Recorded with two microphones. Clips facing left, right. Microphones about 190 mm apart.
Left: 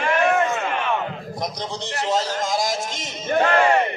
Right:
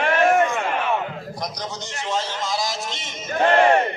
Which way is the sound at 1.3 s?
25° left (ahead or behind).